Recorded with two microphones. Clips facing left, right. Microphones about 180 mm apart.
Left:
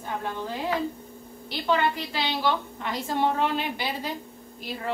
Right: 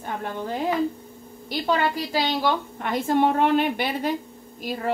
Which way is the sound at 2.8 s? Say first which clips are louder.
Right 5 dB; 55° right (ahead or behind).